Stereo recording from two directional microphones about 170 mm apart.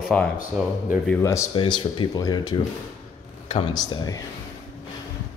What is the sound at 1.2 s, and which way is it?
Speech, 15° left (ahead or behind).